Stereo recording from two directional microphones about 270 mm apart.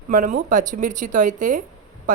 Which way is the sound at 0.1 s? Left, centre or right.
Right.